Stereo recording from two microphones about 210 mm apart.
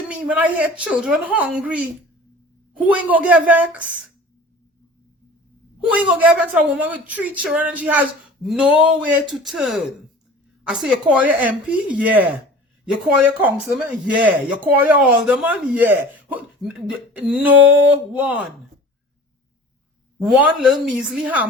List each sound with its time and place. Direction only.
0.1 s a woman's voice: 5° right (ahead or behind)
5.8 s a woman's voice: 5° right (ahead or behind)
20.2 s a woman's voice: 5° right (ahead or behind)